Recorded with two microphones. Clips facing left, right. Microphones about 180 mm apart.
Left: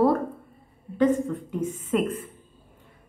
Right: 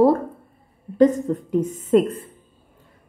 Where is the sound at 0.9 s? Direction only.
40° right (ahead or behind).